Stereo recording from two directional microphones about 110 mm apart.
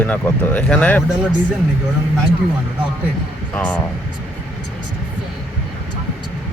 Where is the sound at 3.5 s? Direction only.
15° left (ahead or behind).